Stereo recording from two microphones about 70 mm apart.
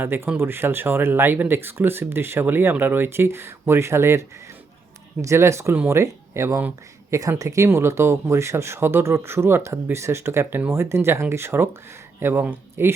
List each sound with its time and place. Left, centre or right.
0.0 s speech: right
7.7 s speech: right